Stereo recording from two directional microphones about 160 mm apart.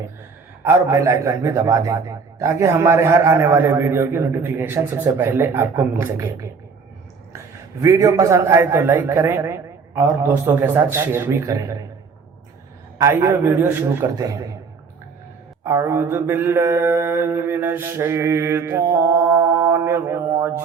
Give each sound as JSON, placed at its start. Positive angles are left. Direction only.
{"t": 0.6, "sound": "a man's voice", "side_deg": -15}
{"t": 7.8, "sound": "a man's voice", "side_deg": -20}
{"t": 13.0, "sound": "a man's voice", "side_deg": -20}
{"t": 15.6, "sound": "mantra", "side_deg": -15}